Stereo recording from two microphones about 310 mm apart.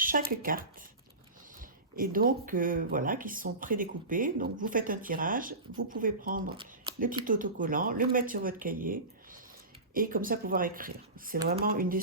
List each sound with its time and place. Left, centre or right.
0.0 s speech: right
2.0 s speech: right
6.6 s a sound: right
7.3 s speech: right